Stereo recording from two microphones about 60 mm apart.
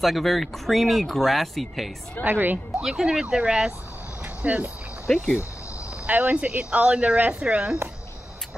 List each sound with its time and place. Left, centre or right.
0.0 s speech: centre
2.2 s a woman's voice: right
2.8 s speech: centre
4.4 s speech: right
5.1 s speech: centre
6.0 s speech: right
6.6 s speech: centre